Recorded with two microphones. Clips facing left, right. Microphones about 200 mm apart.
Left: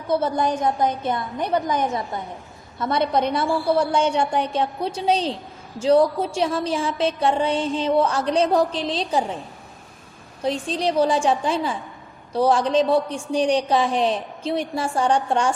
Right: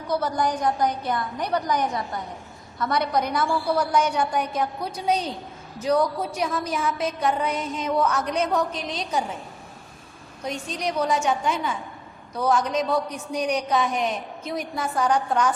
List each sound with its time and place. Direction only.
0.1 s a woman's voice: 25° left (ahead or behind)
10.4 s a woman's voice: 30° left (ahead or behind)